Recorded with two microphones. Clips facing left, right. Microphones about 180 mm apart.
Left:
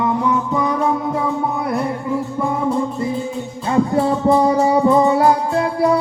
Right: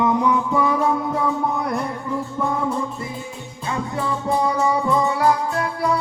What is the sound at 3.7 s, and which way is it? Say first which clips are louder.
Music: left 9 dB; 40° left (ahead or behind).